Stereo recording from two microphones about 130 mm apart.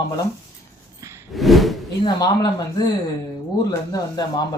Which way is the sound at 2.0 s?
30° left (ahead or behind).